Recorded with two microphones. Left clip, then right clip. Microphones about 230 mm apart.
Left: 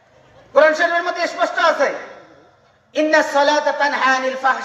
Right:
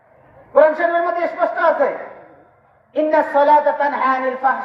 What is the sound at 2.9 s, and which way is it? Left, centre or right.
A woman's voice, right.